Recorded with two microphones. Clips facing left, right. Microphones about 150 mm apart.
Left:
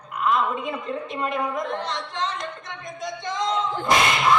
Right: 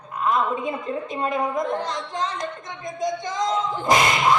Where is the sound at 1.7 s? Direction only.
45° right (ahead or behind).